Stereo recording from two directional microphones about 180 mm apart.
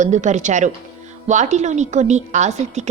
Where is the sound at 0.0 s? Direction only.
40° right (ahead or behind).